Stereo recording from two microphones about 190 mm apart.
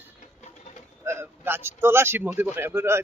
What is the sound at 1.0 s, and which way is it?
Speech, 15° right (ahead or behind).